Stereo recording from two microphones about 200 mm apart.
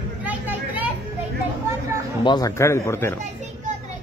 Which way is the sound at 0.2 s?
10° right (ahead or behind).